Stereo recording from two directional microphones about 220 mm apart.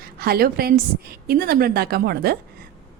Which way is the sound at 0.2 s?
45° right (ahead or behind).